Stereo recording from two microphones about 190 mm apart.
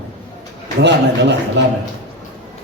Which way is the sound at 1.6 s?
65° right (ahead or behind).